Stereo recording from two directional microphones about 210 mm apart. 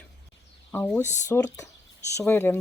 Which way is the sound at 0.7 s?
10° left (ahead or behind).